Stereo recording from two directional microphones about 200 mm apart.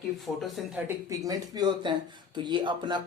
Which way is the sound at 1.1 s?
15° right (ahead or behind).